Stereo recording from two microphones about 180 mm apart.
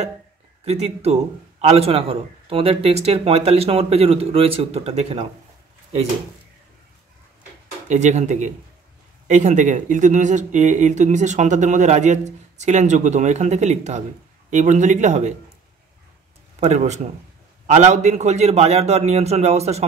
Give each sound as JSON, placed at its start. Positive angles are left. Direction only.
{"t": 0.7, "sound": "speech", "side_deg": -35}
{"t": 7.9, "sound": "speech", "side_deg": -40}
{"t": 16.5, "sound": "speech", "side_deg": -40}